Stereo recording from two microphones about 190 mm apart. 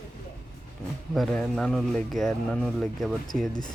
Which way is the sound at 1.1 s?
Centre (ahead or behind).